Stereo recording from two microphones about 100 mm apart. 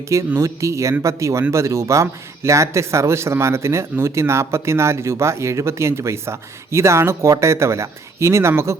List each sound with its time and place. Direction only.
0.3 s speech: 30° right (ahead or behind)